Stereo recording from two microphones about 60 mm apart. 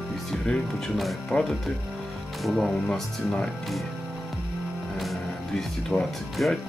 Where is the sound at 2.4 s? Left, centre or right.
Centre.